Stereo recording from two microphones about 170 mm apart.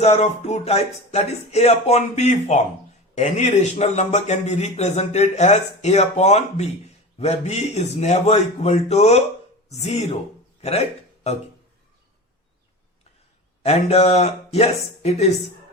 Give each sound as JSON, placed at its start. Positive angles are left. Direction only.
{"t": 0.0, "sound": "a man's voice", "side_deg": 40}
{"t": 10.6, "sound": "a sound", "side_deg": 40}
{"t": 13.6, "sound": "a man's voice", "side_deg": 35}